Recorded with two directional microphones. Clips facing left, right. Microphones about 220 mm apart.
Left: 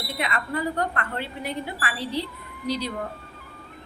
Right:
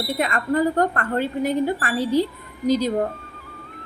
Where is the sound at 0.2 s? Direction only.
45° right (ahead or behind).